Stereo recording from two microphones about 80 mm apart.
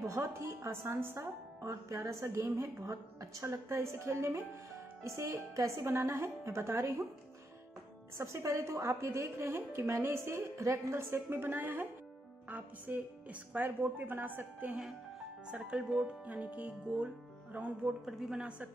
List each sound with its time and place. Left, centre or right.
0.0 s speech: right
8.2 s a woman's voice: right; by 18.7 s centre